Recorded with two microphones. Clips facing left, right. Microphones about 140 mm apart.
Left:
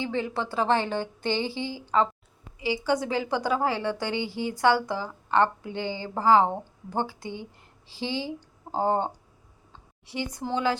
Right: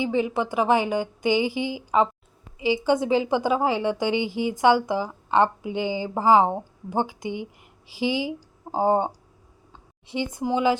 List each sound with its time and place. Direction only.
0.0 s a woman's voice: 15° right (ahead or behind)